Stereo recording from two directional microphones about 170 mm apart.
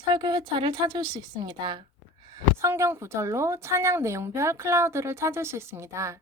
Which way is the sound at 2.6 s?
15° right (ahead or behind).